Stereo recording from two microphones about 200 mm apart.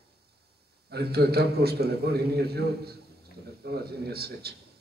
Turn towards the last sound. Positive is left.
turn(degrees=-50)  # may be behind; listen again after turning